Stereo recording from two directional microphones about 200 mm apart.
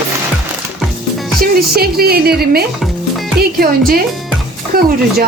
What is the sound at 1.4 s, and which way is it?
Speech, 50° right (ahead or behind).